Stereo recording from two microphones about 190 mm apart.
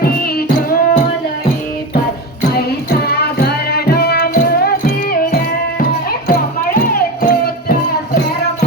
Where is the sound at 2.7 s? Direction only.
55° left (ahead or behind).